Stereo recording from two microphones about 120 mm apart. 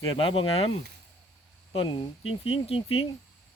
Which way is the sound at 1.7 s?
45° left (ahead or behind).